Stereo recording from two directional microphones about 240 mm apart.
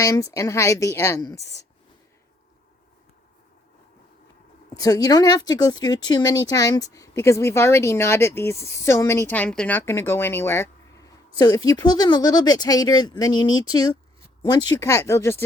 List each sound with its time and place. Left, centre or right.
0.0 s speech: centre
4.7 s speech: centre